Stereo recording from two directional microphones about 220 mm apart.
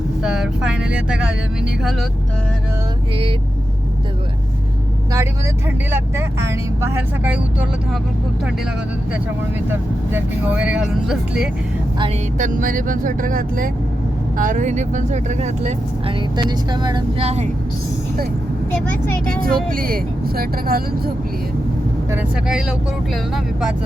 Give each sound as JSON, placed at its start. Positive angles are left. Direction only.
{"t": 0.2, "sound": "speech", "side_deg": -5}
{"t": 5.9, "sound": "speech", "side_deg": -10}
{"t": 9.6, "sound": "speech", "side_deg": -10}
{"t": 12.4, "sound": "speech", "side_deg": -35}
{"t": 16.4, "sound": "speech", "side_deg": -20}
{"t": 19.4, "sound": "speech", "side_deg": -40}
{"t": 22.2, "sound": "speech", "side_deg": -5}